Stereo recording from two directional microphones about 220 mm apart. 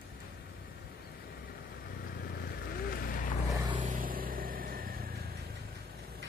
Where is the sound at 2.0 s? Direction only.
45° left (ahead or behind).